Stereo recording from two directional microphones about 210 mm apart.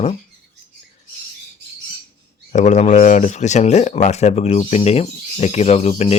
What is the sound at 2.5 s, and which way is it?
Speech, 35° left (ahead or behind).